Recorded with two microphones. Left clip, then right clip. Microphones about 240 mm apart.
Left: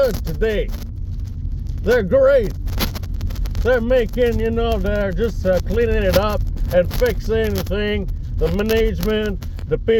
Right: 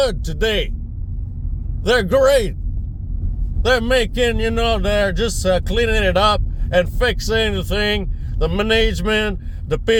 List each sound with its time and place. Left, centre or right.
0.0 s speech: right
1.8 s speech: right
3.6 s speech: right